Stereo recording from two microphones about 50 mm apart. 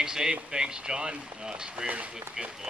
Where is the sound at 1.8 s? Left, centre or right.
Right.